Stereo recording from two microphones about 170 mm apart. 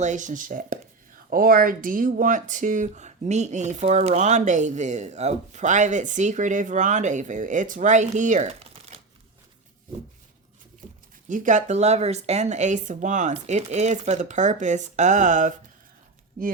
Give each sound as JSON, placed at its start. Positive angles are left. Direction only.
{"t": 0.0, "sound": "speech", "side_deg": -45}
{"t": 11.3, "sound": "speech", "side_deg": -50}